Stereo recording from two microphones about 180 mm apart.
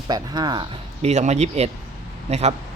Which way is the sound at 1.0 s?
40° right (ahead or behind).